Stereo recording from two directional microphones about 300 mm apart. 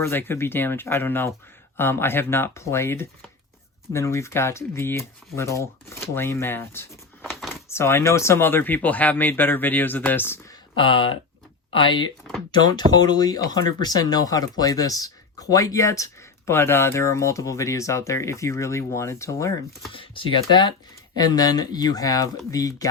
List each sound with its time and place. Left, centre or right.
0.0 s speech: centre